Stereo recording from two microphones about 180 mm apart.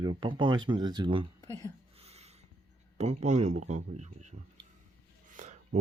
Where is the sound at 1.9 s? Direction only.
35° right (ahead or behind).